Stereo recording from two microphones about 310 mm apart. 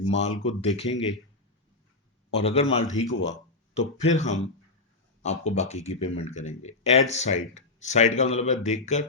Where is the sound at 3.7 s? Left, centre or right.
Left.